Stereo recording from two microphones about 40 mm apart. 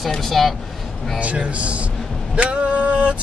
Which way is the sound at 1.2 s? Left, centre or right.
Right.